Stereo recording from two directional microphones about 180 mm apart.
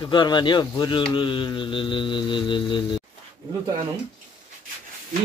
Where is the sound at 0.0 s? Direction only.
25° left (ahead or behind).